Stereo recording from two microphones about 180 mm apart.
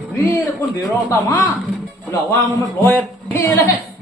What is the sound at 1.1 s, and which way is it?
Speech, 20° left (ahead or behind).